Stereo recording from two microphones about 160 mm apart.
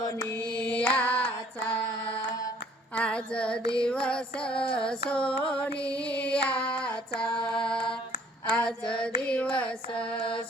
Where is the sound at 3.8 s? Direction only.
5° left (ahead or behind).